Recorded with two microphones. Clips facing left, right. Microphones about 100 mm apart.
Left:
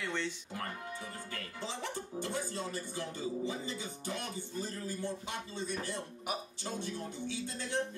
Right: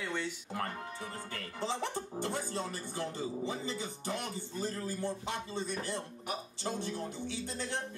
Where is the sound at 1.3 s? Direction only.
30° right (ahead or behind).